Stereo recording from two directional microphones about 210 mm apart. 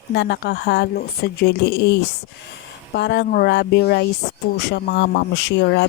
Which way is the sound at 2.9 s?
55° left (ahead or behind).